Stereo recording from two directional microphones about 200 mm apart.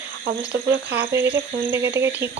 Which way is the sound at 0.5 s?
55° right (ahead or behind).